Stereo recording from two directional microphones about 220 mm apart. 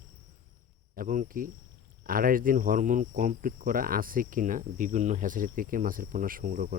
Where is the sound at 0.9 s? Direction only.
35° right (ahead or behind).